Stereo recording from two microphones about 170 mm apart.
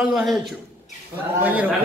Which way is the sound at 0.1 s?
Centre (ahead or behind).